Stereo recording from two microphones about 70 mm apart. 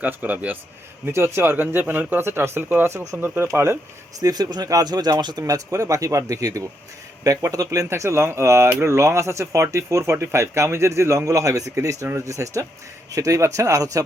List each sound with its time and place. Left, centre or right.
0.0 s speech: right
1.0 s speech: right
3.4 s speech: right
4.2 s speech: right
7.9 s speech: right